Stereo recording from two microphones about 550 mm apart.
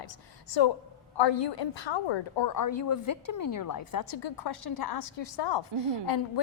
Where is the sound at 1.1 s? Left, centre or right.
Left.